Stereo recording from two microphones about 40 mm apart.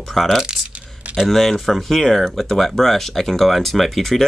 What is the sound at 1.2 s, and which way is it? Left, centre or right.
Speech, centre.